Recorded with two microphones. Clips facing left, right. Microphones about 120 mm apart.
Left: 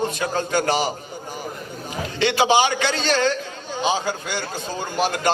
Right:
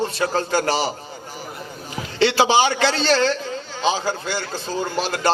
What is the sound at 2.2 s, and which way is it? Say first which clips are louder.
Speech: right 1 dB; 30° right (ahead or behind).